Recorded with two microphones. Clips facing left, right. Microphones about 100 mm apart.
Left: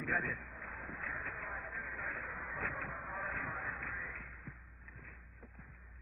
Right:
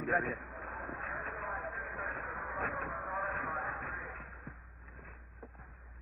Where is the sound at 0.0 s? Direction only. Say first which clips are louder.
Right 5 dB; 35° right (ahead or behind).